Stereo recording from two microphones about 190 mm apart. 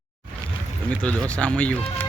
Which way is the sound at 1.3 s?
5° left (ahead or behind).